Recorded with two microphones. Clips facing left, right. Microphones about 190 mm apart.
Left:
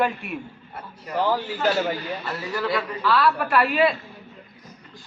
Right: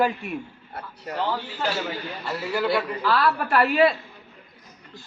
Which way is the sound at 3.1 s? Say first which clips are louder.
Left 1 dB; 45° right (ahead or behind).